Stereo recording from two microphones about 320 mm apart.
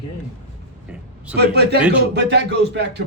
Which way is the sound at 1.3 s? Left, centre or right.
Right.